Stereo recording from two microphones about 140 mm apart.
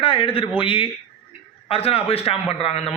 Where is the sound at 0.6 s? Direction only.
35° left (ahead or behind).